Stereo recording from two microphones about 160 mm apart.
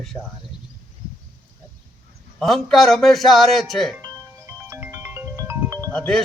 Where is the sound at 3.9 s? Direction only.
15° right (ahead or behind).